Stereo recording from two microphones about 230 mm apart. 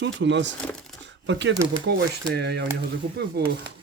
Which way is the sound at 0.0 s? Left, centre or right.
Right.